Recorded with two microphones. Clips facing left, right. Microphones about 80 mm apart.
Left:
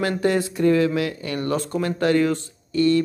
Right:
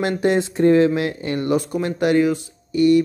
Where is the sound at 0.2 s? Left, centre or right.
Right.